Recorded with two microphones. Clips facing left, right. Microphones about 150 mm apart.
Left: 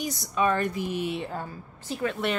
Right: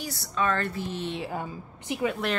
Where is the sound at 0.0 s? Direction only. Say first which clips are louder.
Left 3 dB; 20° left (ahead or behind).